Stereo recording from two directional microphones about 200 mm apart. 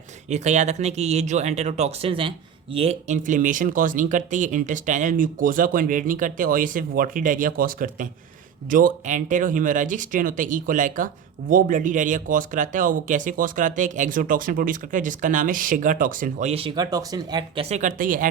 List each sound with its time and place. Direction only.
0.3 s speech: 35° right (ahead or behind)